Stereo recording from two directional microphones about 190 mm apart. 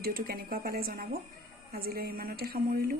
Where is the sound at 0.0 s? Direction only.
50° right (ahead or behind).